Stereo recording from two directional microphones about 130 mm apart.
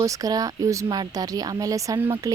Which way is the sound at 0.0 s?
25° right (ahead or behind).